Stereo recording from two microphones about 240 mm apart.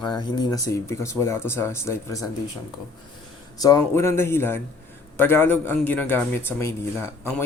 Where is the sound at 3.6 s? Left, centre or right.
Centre.